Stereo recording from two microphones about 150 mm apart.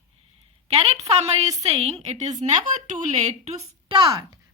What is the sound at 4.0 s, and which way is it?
Speech, 35° right (ahead or behind).